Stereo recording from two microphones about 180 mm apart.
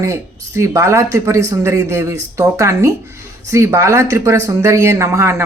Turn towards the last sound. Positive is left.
turn(degrees=-15)  # may be behind; listen again after turning